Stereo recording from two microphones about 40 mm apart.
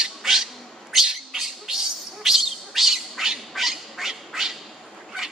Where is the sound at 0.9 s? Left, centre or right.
Centre.